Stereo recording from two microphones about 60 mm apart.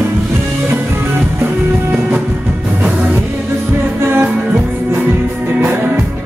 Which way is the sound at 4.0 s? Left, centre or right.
Right.